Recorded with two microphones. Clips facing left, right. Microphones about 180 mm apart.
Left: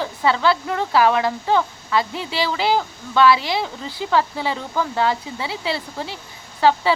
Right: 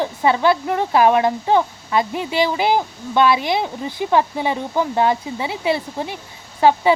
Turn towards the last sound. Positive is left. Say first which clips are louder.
# right 3 dB
turn(degrees=-20)  # may be behind; listen again after turning